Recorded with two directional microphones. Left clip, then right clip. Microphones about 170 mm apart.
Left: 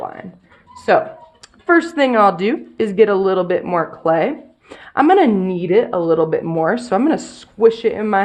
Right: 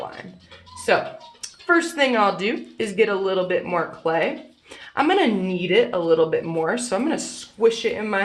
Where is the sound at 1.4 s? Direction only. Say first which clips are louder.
Left 5 dB; 45° left (ahead or behind).